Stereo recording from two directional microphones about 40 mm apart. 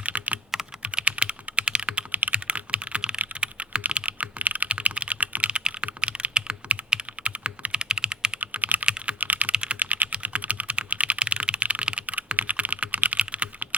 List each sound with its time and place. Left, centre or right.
0.0 s computer keyboard: right
1.0 s typing: right
3.4 s computer keyboard: right
3.8 s computer keyboard: right
8.4 s computer keyboard: right
8.9 s computer keyboard: right
9.2 s typing: right
9.5 s typing: right
9.7 s typing: right
10.8 s computer keyboard: right
12.4 s computer keyboard: right
13.1 s typing: right